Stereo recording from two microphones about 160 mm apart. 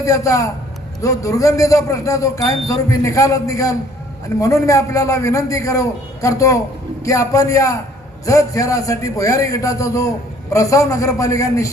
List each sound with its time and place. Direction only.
0.0 s a man's voice: 20° left (ahead or behind)